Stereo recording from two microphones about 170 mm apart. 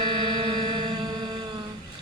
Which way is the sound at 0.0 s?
25° right (ahead or behind).